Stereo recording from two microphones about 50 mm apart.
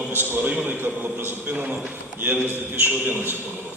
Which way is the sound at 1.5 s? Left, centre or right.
Right.